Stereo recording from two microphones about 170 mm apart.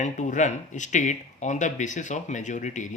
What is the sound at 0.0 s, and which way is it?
Speech, 45° left (ahead or behind).